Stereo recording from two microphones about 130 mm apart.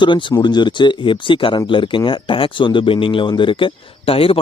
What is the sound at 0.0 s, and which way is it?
Speech, 40° left (ahead or behind).